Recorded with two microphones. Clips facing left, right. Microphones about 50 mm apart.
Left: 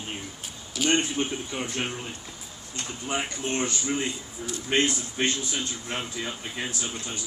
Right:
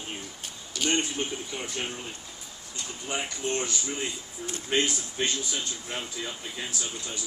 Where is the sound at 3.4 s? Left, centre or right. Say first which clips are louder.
Left 2 dB; left.